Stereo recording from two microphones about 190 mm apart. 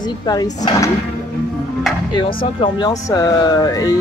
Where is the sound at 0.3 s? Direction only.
20° left (ahead or behind).